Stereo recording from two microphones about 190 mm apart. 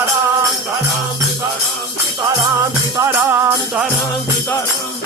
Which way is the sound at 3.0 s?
15° right (ahead or behind).